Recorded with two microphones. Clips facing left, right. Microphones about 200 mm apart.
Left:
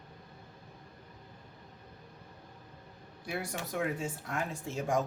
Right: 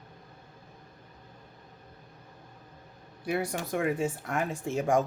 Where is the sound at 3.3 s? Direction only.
60° right (ahead or behind).